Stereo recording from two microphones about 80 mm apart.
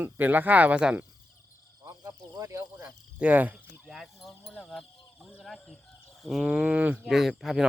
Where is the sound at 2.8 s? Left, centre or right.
Centre.